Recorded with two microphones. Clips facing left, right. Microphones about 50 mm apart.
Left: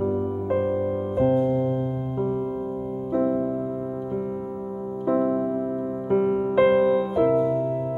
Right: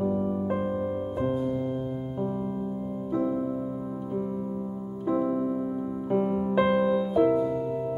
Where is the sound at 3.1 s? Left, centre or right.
Centre.